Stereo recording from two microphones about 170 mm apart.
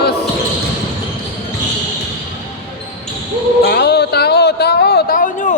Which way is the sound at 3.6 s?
75° left (ahead or behind).